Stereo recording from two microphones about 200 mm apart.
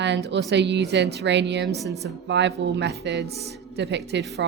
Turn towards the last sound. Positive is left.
turn(degrees=-60)  # may be behind; listen again after turning